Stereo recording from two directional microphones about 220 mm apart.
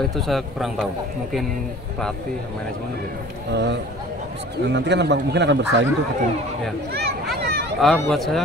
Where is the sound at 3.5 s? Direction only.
50° right (ahead or behind).